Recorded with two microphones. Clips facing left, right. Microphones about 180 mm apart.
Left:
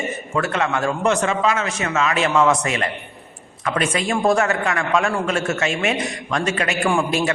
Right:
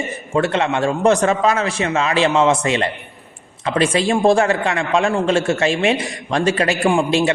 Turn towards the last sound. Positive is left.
turn(degrees=-25)  # may be behind; listen again after turning